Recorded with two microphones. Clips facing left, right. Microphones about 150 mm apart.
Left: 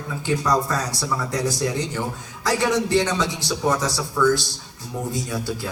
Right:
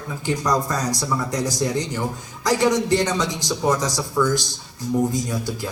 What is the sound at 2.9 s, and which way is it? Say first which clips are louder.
A man's voice: even; 15° right (ahead or behind).